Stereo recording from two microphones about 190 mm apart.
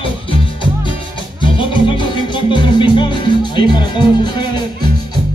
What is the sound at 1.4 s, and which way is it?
Music, 25° left (ahead or behind).